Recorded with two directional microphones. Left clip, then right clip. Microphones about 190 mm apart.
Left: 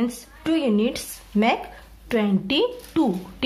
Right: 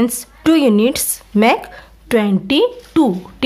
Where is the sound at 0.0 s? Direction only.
40° right (ahead or behind).